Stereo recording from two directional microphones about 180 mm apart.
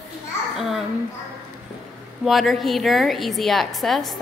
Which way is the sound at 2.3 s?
Centre (ahead or behind).